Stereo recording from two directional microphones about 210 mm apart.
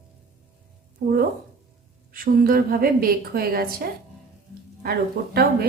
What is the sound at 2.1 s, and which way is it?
A woman's voice, 45° right (ahead or behind).